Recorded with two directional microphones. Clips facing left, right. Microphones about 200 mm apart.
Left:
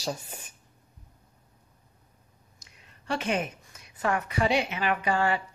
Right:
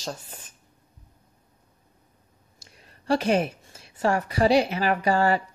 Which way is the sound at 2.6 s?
35° right (ahead or behind).